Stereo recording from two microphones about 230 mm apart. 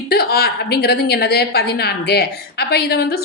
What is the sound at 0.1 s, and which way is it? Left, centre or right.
A woman's voice, left.